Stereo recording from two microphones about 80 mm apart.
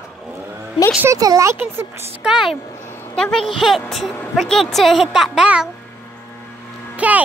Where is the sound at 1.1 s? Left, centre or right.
Right.